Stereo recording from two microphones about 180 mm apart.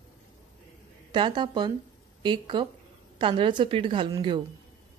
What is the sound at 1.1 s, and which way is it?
A woman's voice, 25° right (ahead or behind).